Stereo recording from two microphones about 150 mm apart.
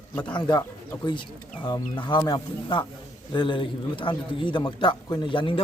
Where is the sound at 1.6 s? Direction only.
30° left (ahead or behind).